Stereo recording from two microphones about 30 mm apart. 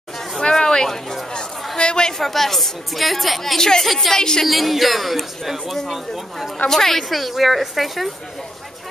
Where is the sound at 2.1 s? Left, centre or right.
Centre.